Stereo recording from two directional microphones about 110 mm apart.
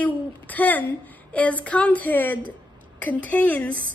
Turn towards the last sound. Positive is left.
turn(degrees=10)  # may be behind; listen again after turning